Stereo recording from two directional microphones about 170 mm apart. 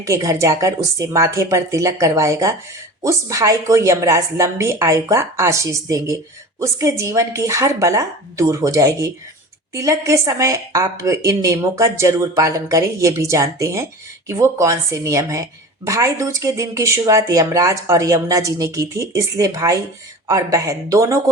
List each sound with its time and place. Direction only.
0.0 s a woman's voice: 20° right (ahead or behind)